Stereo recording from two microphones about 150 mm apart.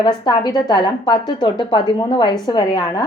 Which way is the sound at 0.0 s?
30° left (ahead or behind).